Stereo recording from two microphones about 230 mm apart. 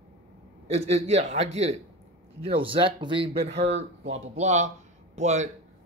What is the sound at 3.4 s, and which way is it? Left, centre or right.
Speech, right.